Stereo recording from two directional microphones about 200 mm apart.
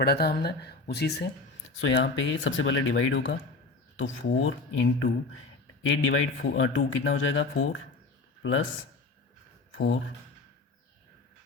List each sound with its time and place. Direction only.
0.0 s speech: 50° left (ahead or behind)
1.8 s speech: 70° left (ahead or behind)